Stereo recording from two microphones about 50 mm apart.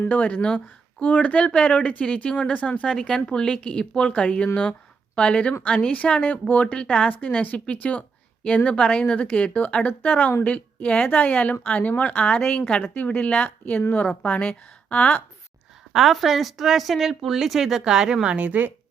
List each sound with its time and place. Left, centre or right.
0.1 s a woman's voice: left
0.4 s speech: centre
1.0 s a woman's voice: left
3.0 s a woman's voice: centre; by 6.7 s left
6.7 s a woman's voice: centre
7.1 s a woman's voice: left
12.8 s a woman's voice: left
15.9 s speech: centre; by 18.7 s right